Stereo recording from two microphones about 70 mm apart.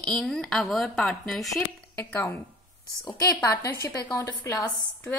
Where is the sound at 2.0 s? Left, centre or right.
Left.